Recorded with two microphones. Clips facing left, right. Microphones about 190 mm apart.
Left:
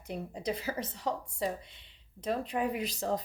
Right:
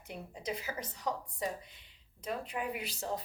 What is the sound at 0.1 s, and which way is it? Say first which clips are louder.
A woman's voice: left 5 dB; 35° left (ahead or behind).